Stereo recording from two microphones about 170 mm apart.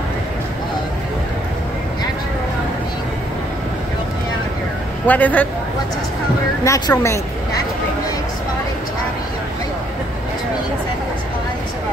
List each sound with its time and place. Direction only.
5.0 s a man's voice: 10° left (ahead or behind)
6.6 s speech: 20° left (ahead or behind)